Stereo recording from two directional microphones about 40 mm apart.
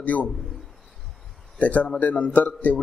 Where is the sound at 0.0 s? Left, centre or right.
Left.